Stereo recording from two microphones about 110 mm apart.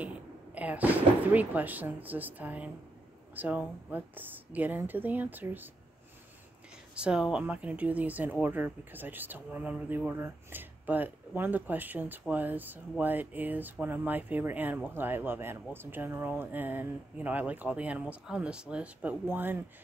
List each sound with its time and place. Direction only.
0.0 s speech: 15° right (ahead or behind)
7.0 s speech: 10° right (ahead or behind)